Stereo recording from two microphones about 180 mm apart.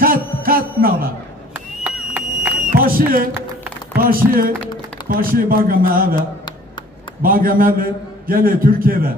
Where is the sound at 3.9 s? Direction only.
55° right (ahead or behind).